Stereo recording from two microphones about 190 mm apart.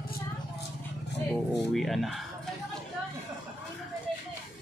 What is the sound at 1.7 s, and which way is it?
Speech, centre (ahead or behind).